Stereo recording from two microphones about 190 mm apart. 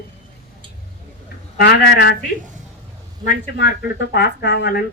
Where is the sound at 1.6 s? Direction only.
60° left (ahead or behind).